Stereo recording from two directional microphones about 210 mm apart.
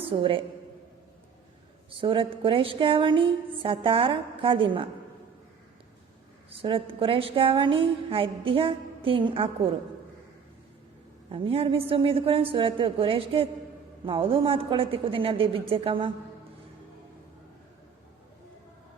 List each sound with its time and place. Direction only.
0.1 s a woman's voice: 25° right (ahead or behind)
2.0 s a woman's voice: 25° right (ahead or behind)
6.5 s a woman's voice: 25° right (ahead or behind)
11.3 s a woman's voice: 25° right (ahead or behind)